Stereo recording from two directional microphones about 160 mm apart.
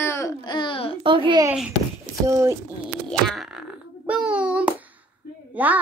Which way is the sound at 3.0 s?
Centre (ahead or behind).